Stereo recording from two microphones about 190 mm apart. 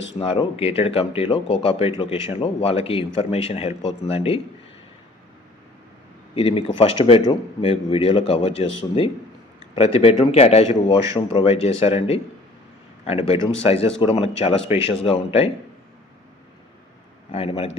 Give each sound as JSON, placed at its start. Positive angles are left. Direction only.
{"t": 0.2, "sound": "speech", "side_deg": 30}
{"t": 6.3, "sound": "speech", "side_deg": 30}
{"t": 17.3, "sound": "speech", "side_deg": 30}